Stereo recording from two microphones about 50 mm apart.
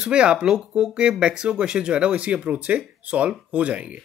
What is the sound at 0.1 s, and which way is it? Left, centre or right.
Speech, centre.